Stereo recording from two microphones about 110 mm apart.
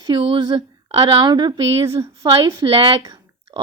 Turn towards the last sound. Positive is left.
turn(degrees=-45)  # may be behind; listen again after turning